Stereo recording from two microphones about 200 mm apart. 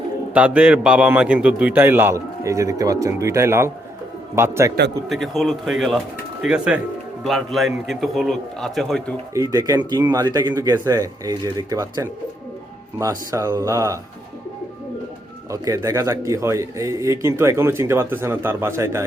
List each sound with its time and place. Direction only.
0.3 s a man's voice: 5° right (ahead or behind)
5.0 s a man's voice: centre (ahead or behind)
9.3 s a man's voice: 15° right (ahead or behind)
15.4 s a man's voice: 15° right (ahead or behind)